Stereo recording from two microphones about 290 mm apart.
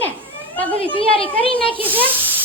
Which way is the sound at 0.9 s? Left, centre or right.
Centre.